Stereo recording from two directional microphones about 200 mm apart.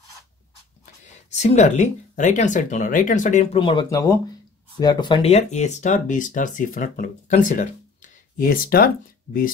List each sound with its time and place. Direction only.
1.3 s speech: 35° left (ahead or behind)
3.5 s speech: 25° left (ahead or behind); by 9.5 s 45° left (ahead or behind)